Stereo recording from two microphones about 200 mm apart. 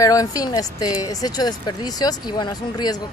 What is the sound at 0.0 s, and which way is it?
A woman's voice, 15° left (ahead or behind).